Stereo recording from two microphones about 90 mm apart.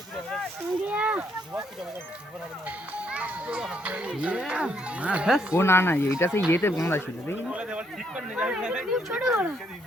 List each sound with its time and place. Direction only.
0.9 s a sound: 10° right (ahead or behind)
2.6 s a child's voice: 15° right (ahead or behind)
5.5 s speech: 25° left (ahead or behind)
7.5 s a child's voice: 15° right (ahead or behind)